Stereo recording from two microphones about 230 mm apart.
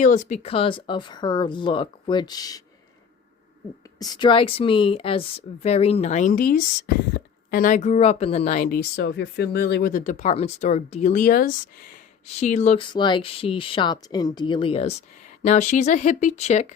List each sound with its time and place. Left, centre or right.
0.0 s speech: left; by 2.6 s centre
3.9 s speech: centre